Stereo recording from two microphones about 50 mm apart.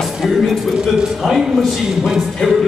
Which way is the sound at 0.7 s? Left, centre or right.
Centre.